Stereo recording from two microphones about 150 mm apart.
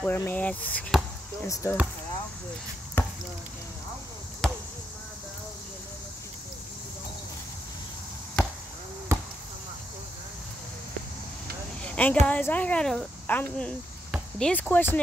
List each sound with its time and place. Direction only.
0.0 s speech: 15° left (ahead or behind)
3.0 s basketball bounce: 15° left (ahead or behind)
4.4 s basketball bounce: centre (ahead or behind)
9.1 s basketball bounce: 15° right (ahead or behind)
11.8 s a sound: 10° left (ahead or behind)
12.3 s speech: 10° left (ahead or behind)